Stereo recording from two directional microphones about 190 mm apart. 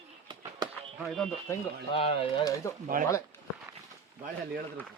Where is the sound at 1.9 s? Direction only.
30° left (ahead or behind).